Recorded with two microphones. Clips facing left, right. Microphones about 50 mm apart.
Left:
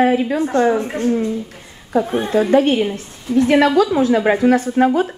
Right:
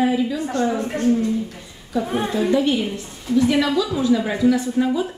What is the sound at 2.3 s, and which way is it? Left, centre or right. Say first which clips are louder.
A woman's voice: left 6 dB; left.